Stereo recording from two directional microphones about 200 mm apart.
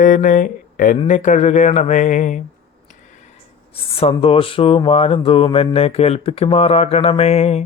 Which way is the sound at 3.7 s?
30° left (ahead or behind).